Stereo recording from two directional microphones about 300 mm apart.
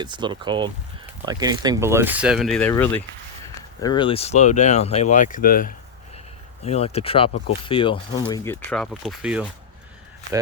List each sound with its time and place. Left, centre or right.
0.0 s speech: centre
8.3 s speech: centre